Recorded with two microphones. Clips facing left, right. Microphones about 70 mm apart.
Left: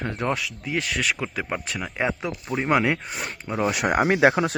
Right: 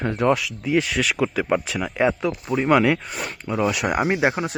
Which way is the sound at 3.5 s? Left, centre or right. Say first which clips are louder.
Right 1 dB; left.